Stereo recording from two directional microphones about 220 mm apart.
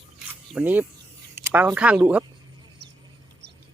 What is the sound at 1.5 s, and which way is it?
Speech, 5° right (ahead or behind).